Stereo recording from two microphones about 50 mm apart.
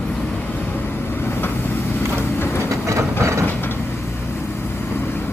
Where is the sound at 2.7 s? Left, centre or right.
Right.